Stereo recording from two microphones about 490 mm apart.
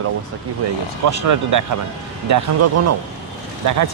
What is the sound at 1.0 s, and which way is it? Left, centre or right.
Speech, right.